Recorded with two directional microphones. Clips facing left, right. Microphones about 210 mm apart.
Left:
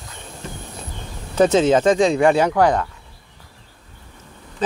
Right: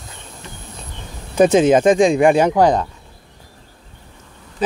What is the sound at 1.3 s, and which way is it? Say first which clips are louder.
Speech: right 3 dB; 15° right (ahead or behind).